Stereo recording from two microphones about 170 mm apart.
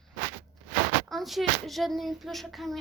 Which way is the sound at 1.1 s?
Centre (ahead or behind).